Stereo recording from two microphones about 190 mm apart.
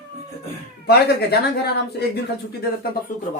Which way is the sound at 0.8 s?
55° left (ahead or behind).